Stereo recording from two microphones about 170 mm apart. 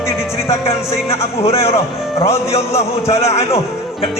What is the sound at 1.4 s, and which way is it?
Speech, 35° left (ahead or behind).